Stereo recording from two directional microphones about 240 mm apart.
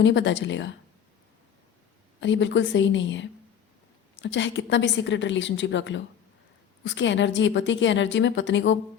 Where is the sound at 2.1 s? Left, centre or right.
Left.